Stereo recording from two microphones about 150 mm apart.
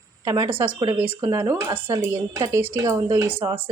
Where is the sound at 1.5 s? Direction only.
20° right (ahead or behind).